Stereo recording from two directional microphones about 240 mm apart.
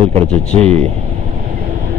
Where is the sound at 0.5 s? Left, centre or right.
Right.